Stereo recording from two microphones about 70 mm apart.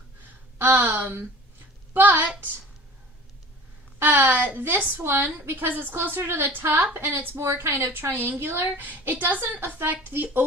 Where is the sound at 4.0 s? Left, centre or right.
Right.